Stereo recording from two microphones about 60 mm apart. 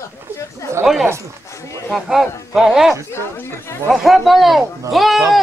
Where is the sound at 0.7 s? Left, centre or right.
Right.